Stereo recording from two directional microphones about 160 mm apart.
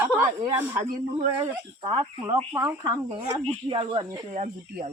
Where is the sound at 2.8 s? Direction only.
25° right (ahead or behind).